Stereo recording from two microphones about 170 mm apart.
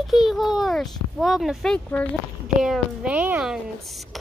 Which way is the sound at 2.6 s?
5° right (ahead or behind).